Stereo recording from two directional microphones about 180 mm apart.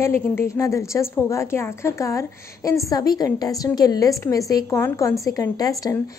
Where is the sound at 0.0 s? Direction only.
15° left (ahead or behind).